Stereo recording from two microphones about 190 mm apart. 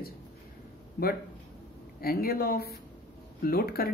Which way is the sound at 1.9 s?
50° left (ahead or behind).